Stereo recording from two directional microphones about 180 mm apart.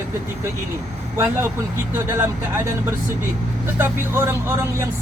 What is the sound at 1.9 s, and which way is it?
Speech, 15° right (ahead or behind).